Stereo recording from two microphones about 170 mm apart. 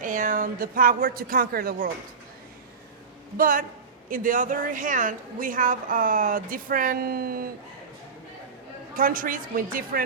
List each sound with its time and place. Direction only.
0.0 s speech: 50° right (ahead or behind)
3.3 s speech: 55° right (ahead or behind)
9.0 s speech: 55° right (ahead or behind)